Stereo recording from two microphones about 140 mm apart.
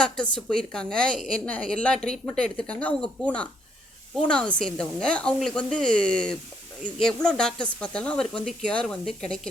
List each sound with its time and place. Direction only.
0.3 s a woman's voice: 5° left (ahead or behind)